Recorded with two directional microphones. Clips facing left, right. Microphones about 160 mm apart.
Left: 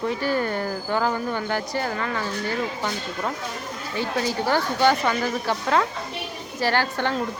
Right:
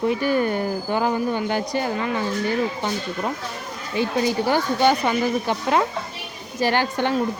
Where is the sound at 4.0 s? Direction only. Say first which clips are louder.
Right 4 dB; 15° right (ahead or behind).